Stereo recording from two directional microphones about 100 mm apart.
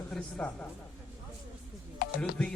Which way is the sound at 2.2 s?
10° left (ahead or behind).